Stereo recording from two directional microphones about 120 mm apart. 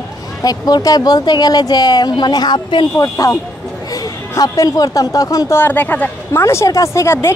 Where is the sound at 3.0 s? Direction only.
30° left (ahead or behind).